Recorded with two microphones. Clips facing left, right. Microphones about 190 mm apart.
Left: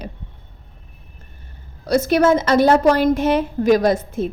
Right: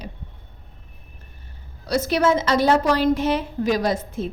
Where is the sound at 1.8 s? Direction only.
50° left (ahead or behind).